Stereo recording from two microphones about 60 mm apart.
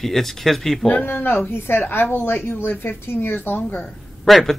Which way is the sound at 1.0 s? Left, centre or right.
Left.